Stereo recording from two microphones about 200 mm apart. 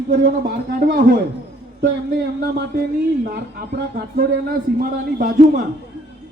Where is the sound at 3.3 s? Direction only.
50° right (ahead or behind).